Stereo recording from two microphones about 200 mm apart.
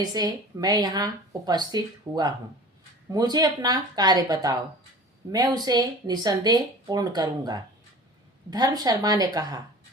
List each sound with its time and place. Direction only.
0.0 s speech: 20° right (ahead or behind)